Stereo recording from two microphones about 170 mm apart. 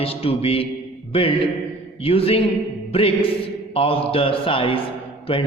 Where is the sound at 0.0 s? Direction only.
35° left (ahead or behind).